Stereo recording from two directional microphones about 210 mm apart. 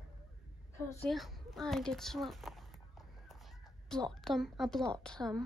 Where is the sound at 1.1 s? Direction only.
Centre (ahead or behind).